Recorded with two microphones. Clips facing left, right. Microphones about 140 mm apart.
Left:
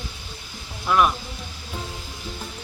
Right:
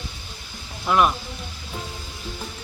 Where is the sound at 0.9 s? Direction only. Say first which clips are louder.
Even; 5° right (ahead or behind).